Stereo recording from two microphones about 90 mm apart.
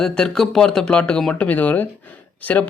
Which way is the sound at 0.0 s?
5° left (ahead or behind).